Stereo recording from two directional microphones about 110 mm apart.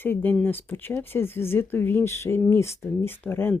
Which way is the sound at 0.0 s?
15° left (ahead or behind).